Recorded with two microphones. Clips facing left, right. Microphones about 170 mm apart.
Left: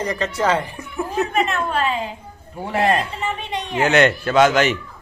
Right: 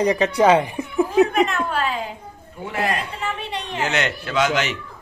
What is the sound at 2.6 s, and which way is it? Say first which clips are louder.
Speech: left 5 dB; 30° left (ahead or behind).